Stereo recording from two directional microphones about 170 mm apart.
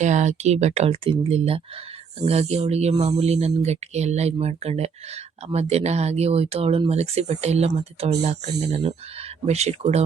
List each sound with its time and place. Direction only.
0.0 s speech: 45° right (ahead or behind)